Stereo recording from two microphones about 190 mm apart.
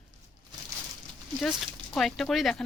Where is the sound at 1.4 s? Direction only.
Centre (ahead or behind).